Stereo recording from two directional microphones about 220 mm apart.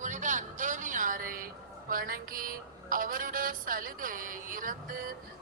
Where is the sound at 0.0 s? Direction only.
35° right (ahead or behind).